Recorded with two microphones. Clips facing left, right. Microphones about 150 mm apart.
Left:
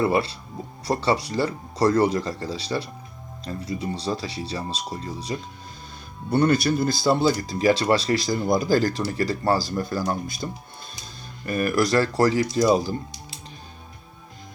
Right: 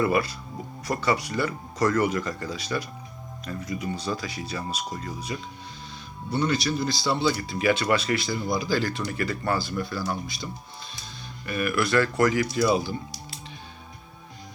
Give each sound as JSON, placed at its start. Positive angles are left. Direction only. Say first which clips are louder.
{"t": 0.0, "sound": "speech", "louder": "left 2 dB", "side_deg": 30}
{"t": 6.3, "sound": "speech", "louder": "left 6 dB", "side_deg": 55}